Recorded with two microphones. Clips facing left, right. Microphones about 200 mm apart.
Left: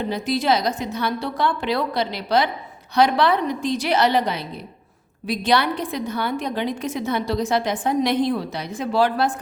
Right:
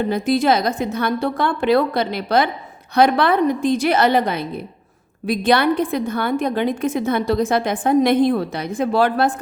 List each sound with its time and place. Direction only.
0.0 s a woman's voice: 50° right (ahead or behind)